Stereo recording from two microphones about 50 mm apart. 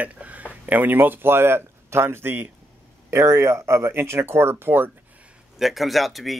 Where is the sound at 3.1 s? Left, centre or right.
Right.